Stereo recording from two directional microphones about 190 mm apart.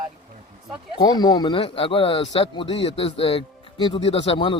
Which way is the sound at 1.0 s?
20° left (ahead or behind).